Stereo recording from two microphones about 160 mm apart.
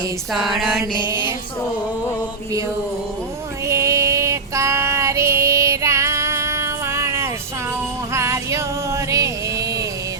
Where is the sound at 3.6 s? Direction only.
20° right (ahead or behind).